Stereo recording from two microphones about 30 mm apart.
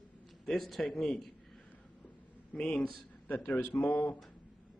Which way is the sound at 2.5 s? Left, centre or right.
Left.